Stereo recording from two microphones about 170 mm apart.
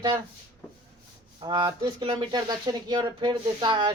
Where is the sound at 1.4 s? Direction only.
25° right (ahead or behind).